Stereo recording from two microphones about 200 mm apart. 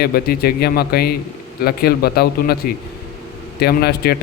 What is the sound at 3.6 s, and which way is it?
Speech, 50° left (ahead or behind).